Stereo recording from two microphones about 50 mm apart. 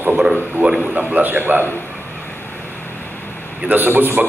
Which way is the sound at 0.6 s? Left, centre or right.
Centre.